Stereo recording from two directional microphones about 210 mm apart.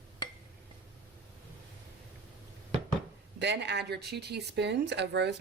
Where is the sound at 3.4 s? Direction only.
55° right (ahead or behind).